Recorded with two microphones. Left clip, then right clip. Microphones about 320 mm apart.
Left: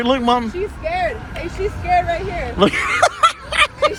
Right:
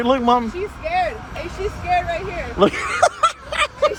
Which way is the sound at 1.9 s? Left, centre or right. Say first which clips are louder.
Left 3 dB; left.